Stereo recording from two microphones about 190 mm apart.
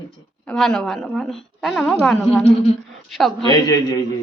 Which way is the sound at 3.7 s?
20° left (ahead or behind).